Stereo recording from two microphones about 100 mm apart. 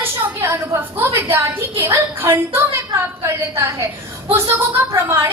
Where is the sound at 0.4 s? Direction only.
25° right (ahead or behind).